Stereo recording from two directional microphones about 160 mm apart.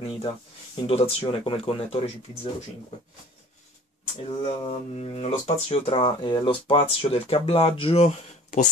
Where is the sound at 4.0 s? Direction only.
40° left (ahead or behind).